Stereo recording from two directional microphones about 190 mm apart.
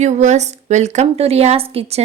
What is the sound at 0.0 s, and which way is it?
Speech, 35° right (ahead or behind).